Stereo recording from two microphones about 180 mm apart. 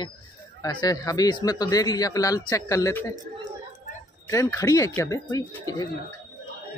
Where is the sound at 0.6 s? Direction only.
20° left (ahead or behind).